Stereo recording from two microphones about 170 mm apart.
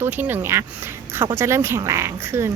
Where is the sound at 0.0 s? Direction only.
10° right (ahead or behind).